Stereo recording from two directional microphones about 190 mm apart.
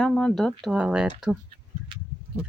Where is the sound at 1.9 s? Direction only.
25° right (ahead or behind).